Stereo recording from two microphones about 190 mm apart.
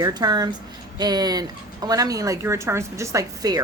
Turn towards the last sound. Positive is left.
turn(degrees=-20)  # may be behind; listen again after turning